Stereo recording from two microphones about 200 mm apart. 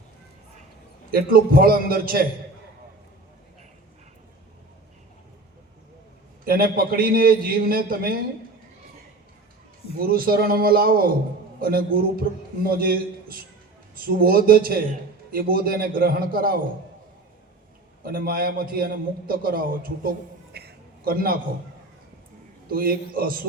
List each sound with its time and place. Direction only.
1.1 s a man's voice: 50° right (ahead or behind)
6.4 s a man's voice: 50° right (ahead or behind)
10.0 s a man's voice: 50° right (ahead or behind)
18.0 s a man's voice: 45° right (ahead or behind)
22.7 s a man's voice: 45° right (ahead or behind)